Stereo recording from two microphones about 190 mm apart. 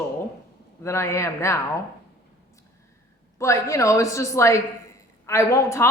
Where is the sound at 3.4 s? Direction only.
15° left (ahead or behind).